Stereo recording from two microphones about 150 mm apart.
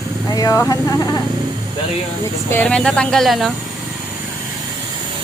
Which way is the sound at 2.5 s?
10° left (ahead or behind).